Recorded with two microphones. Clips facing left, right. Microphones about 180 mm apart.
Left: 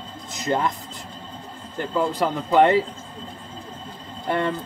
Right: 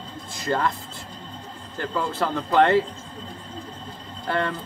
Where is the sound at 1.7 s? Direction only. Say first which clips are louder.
Left 4 dB; 15° left (ahead or behind).